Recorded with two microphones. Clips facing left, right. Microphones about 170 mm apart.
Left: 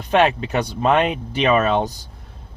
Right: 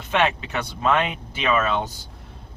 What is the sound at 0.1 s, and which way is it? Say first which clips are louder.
Speech: left 5 dB; 40° left (ahead or behind).